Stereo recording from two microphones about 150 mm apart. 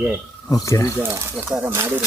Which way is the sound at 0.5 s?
20° left (ahead or behind).